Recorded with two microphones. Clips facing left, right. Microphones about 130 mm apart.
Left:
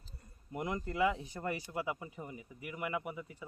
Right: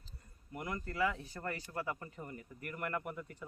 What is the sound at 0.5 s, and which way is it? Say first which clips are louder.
Speech: left 4 dB; 20° left (ahead or behind).